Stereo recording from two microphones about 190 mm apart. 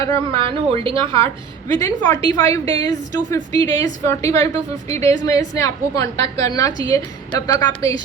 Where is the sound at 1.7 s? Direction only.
20° left (ahead or behind).